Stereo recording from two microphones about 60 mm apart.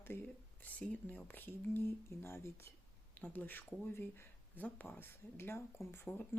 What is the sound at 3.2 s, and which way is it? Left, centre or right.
Speech, left.